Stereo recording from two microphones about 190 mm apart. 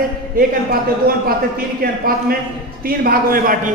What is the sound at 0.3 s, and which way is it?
Speech, 50° right (ahead or behind).